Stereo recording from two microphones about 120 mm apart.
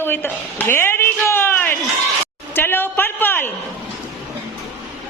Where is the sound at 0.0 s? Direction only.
20° left (ahead or behind).